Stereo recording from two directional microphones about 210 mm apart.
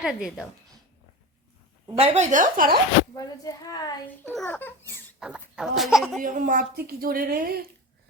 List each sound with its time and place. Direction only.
0.0 s speech: centre (ahead or behind)
2.0 s speech: 30° right (ahead or behind)
3.2 s a woman's voice: 15° left (ahead or behind)
4.2 s speech: 10° left (ahead or behind)
5.2 s speech: 5° right (ahead or behind)
6.2 s speech: 40° right (ahead or behind)